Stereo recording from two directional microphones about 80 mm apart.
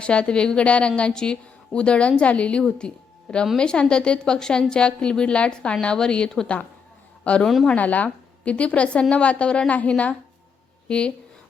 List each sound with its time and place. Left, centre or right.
0.0 s a woman's voice: centre
7.8 s a woman's voice: centre